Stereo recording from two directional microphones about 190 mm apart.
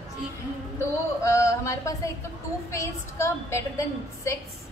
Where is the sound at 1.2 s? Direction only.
15° left (ahead or behind).